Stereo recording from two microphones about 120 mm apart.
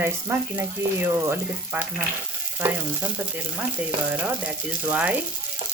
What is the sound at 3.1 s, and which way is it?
Speech, 15° right (ahead or behind).